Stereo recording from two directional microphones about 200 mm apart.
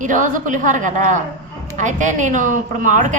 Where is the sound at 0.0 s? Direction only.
40° right (ahead or behind).